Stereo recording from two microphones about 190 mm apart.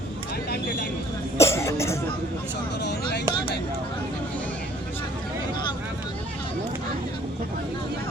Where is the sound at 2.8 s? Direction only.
60° left (ahead or behind).